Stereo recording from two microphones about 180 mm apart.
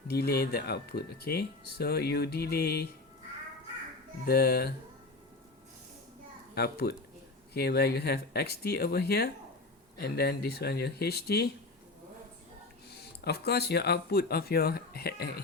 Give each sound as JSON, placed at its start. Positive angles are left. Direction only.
{"t": 0.1, "sound": "speech", "side_deg": 65}
{"t": 4.3, "sound": "speech", "side_deg": 60}
{"t": 6.5, "sound": "a child's voice", "side_deg": 65}
{"t": 12.9, "sound": "speech", "side_deg": 65}